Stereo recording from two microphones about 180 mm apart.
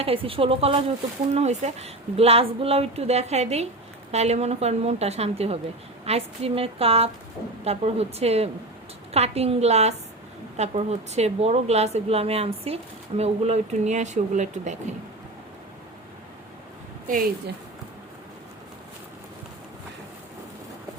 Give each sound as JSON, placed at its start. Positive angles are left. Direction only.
{"t": 0.0, "sound": "a woman's voice", "side_deg": -30}
{"t": 17.1, "sound": "a woman's voice", "side_deg": -50}